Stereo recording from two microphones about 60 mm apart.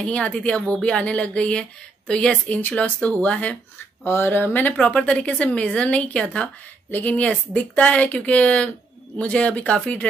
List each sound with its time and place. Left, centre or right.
0.0 s speech: centre
4.0 s speech: left